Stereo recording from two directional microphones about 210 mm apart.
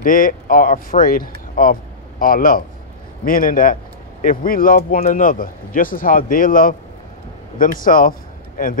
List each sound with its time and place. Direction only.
0.0 s speech: 40° left (ahead or behind)